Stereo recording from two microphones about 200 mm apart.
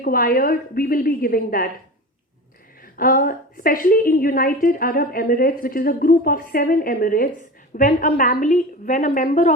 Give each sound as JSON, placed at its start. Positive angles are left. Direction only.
{"t": 0.0, "sound": "a woman's voice", "side_deg": 45}
{"t": 2.9, "sound": "a woman's voice", "side_deg": 45}